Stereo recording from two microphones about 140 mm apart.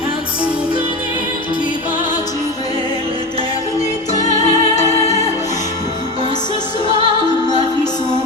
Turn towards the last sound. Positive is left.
turn(degrees=-40)  # may be behind; listen again after turning